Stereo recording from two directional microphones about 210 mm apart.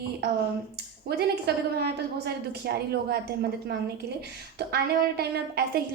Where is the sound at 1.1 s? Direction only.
50° right (ahead or behind).